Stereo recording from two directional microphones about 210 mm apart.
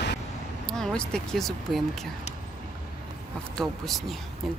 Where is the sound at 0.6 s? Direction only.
5° left (ahead or behind).